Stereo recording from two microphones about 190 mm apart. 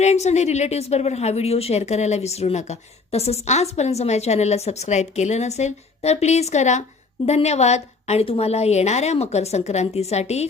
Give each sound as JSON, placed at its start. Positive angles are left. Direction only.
{"t": 0.0, "sound": "speech", "side_deg": 35}